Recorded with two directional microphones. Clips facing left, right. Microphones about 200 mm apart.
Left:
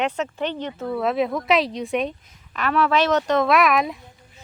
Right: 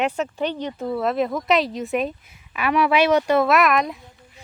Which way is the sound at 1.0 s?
Centre (ahead or behind).